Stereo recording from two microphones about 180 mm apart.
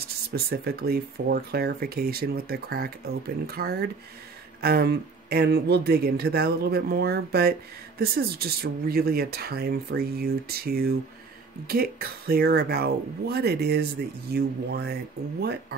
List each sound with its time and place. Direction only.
0.0 s speech: 60° right (ahead or behind)